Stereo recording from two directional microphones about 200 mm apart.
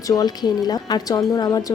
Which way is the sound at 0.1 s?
20° left (ahead or behind).